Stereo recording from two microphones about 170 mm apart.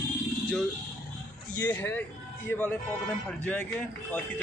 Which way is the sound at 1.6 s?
15° left (ahead or behind).